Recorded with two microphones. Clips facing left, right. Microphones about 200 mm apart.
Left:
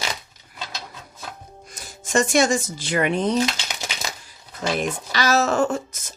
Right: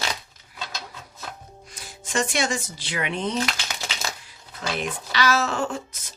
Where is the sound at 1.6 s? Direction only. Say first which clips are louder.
Left 2 dB; 45° left (ahead or behind).